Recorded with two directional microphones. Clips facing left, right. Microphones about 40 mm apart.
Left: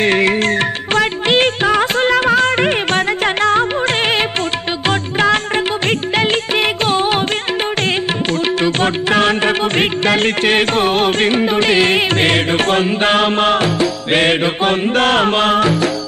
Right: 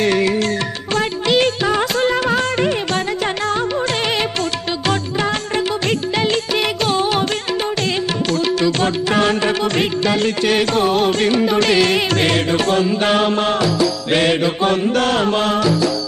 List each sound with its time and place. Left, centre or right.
0.0 s music: left
6.1 s music: left
8.6 s music: left